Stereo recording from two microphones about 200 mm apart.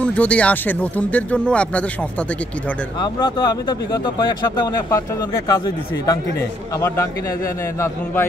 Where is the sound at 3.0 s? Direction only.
20° left (ahead or behind).